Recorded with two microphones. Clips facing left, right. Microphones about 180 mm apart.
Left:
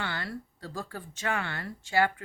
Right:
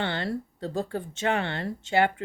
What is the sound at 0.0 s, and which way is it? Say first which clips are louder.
Speech: right 7 dB; 25° right (ahead or behind).